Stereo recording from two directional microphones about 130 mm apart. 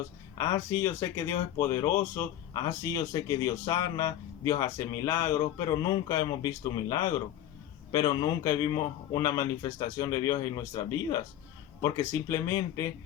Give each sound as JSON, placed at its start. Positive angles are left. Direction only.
{"t": 0.3, "sound": "speech", "side_deg": 25}